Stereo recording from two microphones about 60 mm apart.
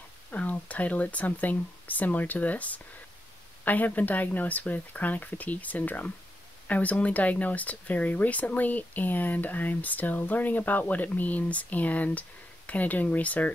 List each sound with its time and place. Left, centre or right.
0.3 s speech: left